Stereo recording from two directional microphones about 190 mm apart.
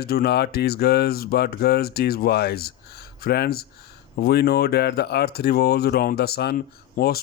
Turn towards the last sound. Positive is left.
turn(degrees=55)  # may be behind; listen again after turning